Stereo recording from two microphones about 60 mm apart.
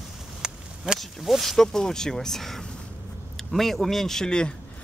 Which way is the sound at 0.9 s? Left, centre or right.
Centre.